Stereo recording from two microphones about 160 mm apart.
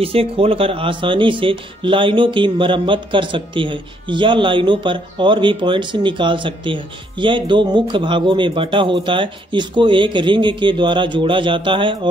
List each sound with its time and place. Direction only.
0.0 s speech: 35° right (ahead or behind)